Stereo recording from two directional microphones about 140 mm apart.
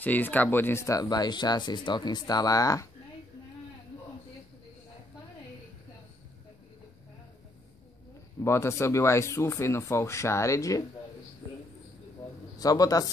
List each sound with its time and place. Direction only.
0.0 s speech: 15° left (ahead or behind)
8.4 s speech: 20° left (ahead or behind)
12.5 s a man's voice: 25° left (ahead or behind)